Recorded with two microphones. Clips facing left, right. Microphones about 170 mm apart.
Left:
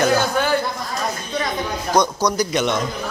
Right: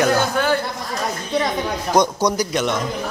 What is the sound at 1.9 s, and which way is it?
Speech, 25° right (ahead or behind).